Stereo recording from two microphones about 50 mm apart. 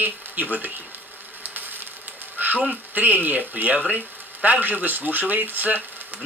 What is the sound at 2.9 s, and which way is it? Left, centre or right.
Speech, right.